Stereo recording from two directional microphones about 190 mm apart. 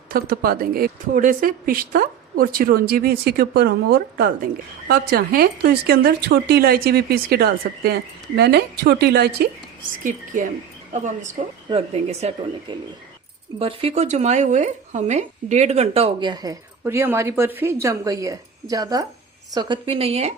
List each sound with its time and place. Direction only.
0.1 s a woman's voice: 50° right (ahead or behind)
10.0 s a woman's voice: 45° right (ahead or behind)